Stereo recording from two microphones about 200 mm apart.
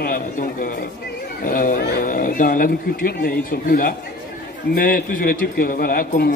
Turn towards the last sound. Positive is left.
turn(degrees=45)  # may be behind; listen again after turning